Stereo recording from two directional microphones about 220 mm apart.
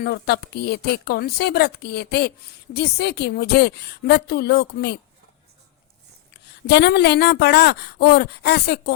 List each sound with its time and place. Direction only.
0.0 s speech: 45° left (ahead or behind)
6.3 s speech: 50° left (ahead or behind)